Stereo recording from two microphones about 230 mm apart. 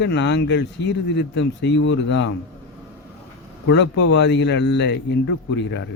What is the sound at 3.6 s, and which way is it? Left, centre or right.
Speech, left.